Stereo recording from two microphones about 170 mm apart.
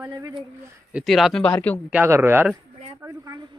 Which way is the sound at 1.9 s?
10° right (ahead or behind).